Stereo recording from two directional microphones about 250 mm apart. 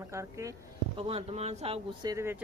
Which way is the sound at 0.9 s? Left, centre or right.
Right.